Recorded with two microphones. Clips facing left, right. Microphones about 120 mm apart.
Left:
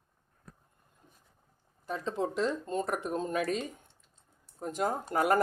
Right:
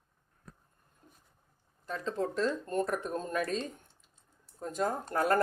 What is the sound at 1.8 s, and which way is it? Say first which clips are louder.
Speech: left 1 dB; 15° left (ahead or behind).